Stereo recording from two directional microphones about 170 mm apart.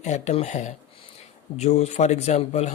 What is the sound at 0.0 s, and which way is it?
A man's voice, 40° left (ahead or behind).